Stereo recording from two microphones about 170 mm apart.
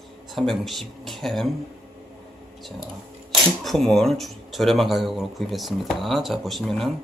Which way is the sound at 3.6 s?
Centre (ahead or behind).